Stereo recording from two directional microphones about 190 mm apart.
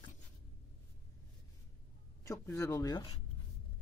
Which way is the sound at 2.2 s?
15° left (ahead or behind).